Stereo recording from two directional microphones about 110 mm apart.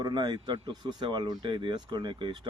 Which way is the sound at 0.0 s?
40° right (ahead or behind).